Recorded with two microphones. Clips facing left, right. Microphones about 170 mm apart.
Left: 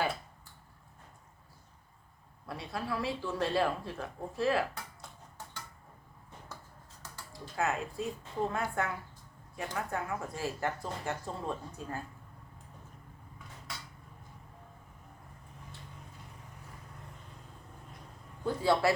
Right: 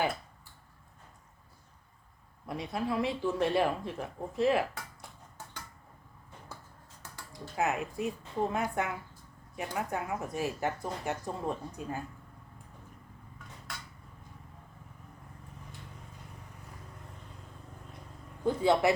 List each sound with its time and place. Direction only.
2.5 s speech: 20° right (ahead or behind)
7.0 s speech: 20° right (ahead or behind)
18.4 s speech: 20° right (ahead or behind)